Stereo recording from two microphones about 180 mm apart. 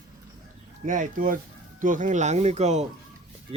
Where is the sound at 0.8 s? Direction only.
45° right (ahead or behind).